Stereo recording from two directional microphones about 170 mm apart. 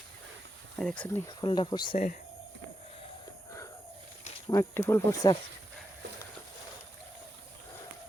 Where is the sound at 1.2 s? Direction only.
30° left (ahead or behind).